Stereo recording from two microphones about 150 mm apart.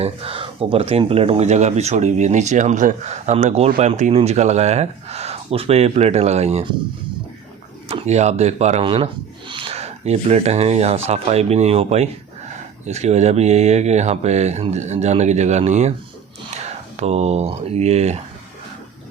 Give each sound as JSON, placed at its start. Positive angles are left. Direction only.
{"t": 0.0, "sound": "speech", "side_deg": -40}
{"t": 7.9, "sound": "speech", "side_deg": -45}
{"t": 8.8, "sound": "speech", "side_deg": -35}